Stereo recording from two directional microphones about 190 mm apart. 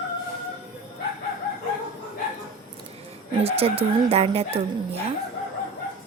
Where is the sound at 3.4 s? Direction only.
30° right (ahead or behind).